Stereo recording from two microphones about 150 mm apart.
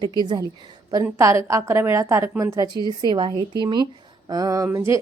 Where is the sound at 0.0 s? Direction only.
30° right (ahead or behind).